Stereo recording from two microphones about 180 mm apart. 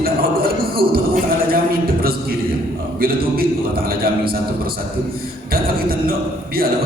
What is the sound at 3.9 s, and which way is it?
Speech, 55° right (ahead or behind).